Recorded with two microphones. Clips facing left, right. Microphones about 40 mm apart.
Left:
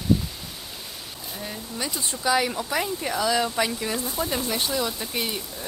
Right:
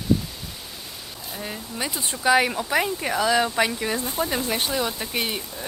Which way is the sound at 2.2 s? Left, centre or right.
Right.